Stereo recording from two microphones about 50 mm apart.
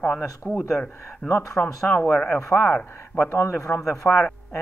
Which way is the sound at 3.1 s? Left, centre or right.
Left.